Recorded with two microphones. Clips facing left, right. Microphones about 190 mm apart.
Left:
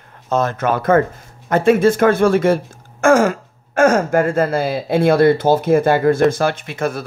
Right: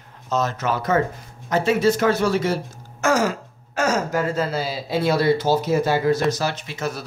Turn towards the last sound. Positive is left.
turn(degrees=55)  # may be behind; listen again after turning